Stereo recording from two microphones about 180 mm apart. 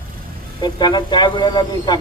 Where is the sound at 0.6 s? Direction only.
25° left (ahead or behind).